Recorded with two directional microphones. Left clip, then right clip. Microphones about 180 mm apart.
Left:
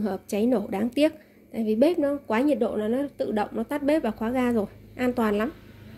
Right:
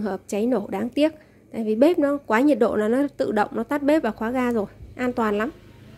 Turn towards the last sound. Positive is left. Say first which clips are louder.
# right 2 dB
turn(degrees=-10)  # may be behind; listen again after turning